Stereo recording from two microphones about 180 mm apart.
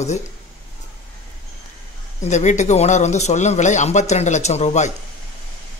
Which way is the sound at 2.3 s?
40° left (ahead or behind).